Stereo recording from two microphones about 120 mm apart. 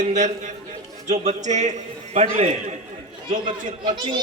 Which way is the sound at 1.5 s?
80° right.